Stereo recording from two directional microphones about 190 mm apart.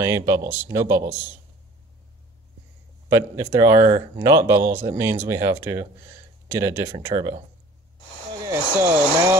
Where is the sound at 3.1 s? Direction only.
15° right (ahead or behind).